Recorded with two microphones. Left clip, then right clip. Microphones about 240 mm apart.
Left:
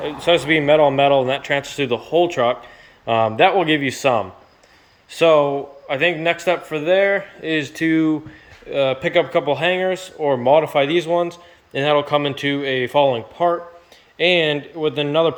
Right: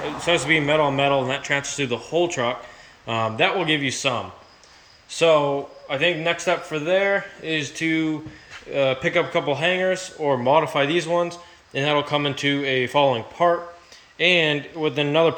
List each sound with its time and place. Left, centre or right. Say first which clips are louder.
0.3 s a man's voice: left 5 dB; centre
8.7 s a man's voice: left 3 dB; centre